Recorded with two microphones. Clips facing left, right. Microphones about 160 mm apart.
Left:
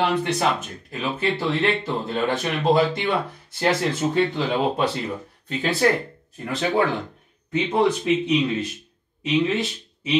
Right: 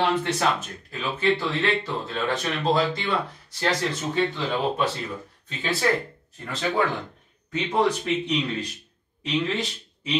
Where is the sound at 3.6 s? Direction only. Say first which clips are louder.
Left 4 dB; 10° left (ahead or behind).